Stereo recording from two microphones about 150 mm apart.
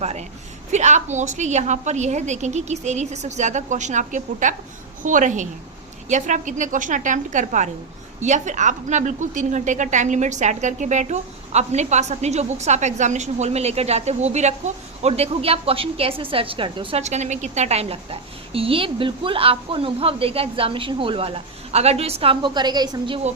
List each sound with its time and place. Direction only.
0.0 s a woman's voice: 45° right (ahead or behind)
17.0 s a woman's voice: 50° right (ahead or behind); by 23.2 s 30° right (ahead or behind)